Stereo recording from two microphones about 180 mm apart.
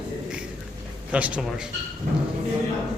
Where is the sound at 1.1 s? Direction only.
5° right (ahead or behind).